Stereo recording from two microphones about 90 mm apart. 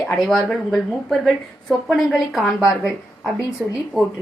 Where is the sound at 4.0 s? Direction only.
5° left (ahead or behind).